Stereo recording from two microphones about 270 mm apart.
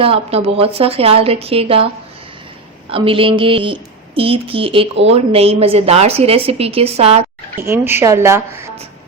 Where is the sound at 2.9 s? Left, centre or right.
Centre.